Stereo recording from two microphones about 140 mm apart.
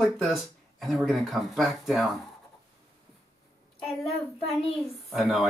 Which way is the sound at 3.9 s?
45° left (ahead or behind).